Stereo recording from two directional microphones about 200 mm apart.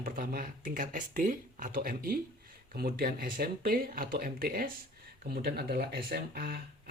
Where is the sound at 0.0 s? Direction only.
45° right (ahead or behind).